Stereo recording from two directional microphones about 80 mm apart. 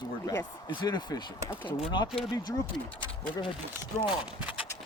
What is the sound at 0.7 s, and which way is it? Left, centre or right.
Speech, left.